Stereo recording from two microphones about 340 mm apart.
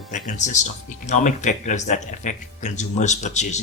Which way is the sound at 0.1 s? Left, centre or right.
Left.